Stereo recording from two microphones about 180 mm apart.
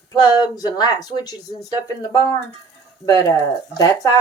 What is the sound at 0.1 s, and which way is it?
Speech, 20° left (ahead or behind).